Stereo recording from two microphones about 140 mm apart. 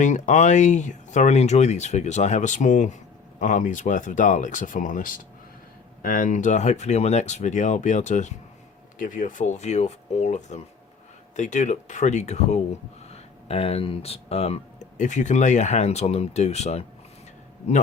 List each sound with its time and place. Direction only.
0.0 s speech: 60° left (ahead or behind)
9.0 s speech: 70° left (ahead or behind); by 16.8 s 50° left (ahead or behind)